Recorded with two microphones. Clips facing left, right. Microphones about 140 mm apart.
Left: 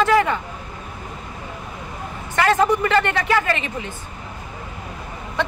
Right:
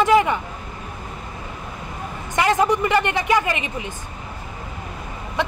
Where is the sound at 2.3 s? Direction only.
15° right (ahead or behind).